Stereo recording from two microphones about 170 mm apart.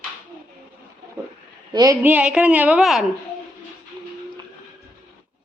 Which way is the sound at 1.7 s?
20° right (ahead or behind).